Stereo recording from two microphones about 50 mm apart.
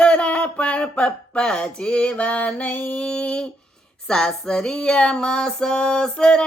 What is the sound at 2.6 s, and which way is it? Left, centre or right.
Female singing, left.